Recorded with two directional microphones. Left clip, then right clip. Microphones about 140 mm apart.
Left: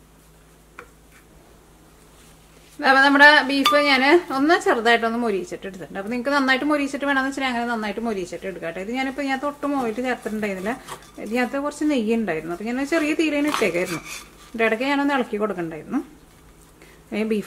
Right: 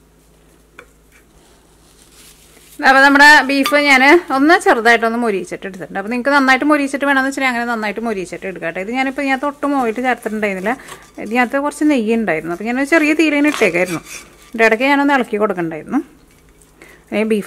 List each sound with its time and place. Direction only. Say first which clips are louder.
2.8 s a woman's voice: right 5 dB; 30° right (ahead or behind)
17.1 s speech: right 8 dB; 30° right (ahead or behind)